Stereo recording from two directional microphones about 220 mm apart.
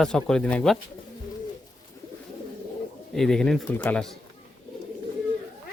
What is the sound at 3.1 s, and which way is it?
Speech, centre (ahead or behind).